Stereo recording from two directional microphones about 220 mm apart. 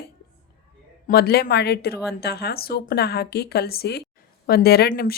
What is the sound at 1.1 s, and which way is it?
Speech, 45° left (ahead or behind).